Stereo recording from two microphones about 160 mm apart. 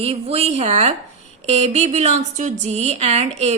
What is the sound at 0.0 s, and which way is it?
A woman's voice, 40° right (ahead or behind).